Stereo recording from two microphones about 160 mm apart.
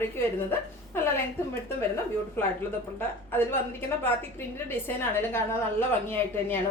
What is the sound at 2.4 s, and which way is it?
A woman's voice, 15° left (ahead or behind).